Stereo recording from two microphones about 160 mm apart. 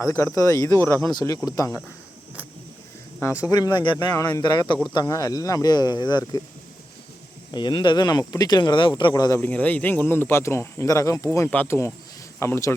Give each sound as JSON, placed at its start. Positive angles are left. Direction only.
{"t": 0.0, "sound": "speech", "side_deg": 15}
{"t": 3.2, "sound": "speech", "side_deg": 15}
{"t": 7.5, "sound": "speech", "side_deg": 30}
{"t": 9.4, "sound": "speech", "side_deg": 10}